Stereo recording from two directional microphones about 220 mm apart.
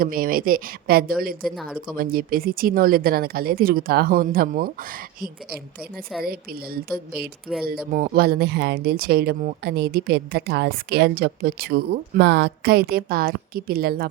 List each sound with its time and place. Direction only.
0.0 s a woman's voice: 40° right (ahead or behind)
1.5 s speech: centre (ahead or behind)
2.0 s speech: 40° right (ahead or behind)
6.7 s speech: 45° right (ahead or behind)